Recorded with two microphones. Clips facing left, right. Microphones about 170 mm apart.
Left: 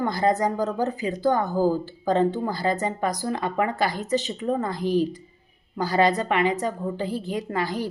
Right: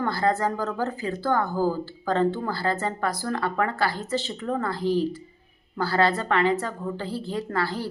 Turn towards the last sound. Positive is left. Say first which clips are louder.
# left 1 dB
turn(degrees=15)  # may be behind; listen again after turning